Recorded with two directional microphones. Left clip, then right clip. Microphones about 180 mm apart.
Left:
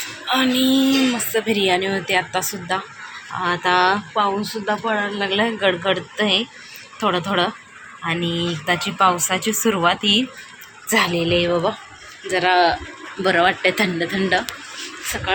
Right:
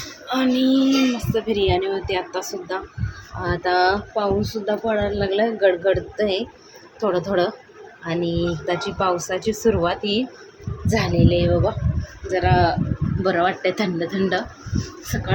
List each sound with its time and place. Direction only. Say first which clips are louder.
0.3 s speech: left 2 dB; 5° right (ahead or behind)